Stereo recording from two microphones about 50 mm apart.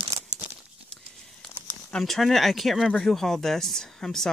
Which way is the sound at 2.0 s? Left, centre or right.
Centre.